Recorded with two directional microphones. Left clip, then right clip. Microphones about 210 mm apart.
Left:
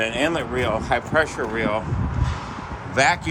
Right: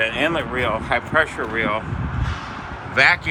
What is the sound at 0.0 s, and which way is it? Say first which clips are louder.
Speech: right 2 dB; 15° left (ahead or behind).